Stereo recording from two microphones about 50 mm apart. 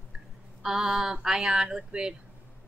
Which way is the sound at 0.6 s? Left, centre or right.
Centre.